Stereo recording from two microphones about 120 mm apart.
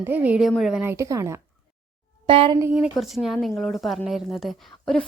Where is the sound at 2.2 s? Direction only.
45° right (ahead or behind).